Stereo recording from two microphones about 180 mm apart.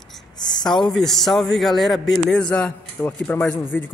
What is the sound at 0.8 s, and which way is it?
A man's voice, centre (ahead or behind).